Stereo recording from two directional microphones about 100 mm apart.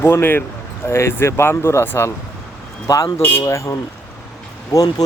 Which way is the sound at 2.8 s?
40° left (ahead or behind).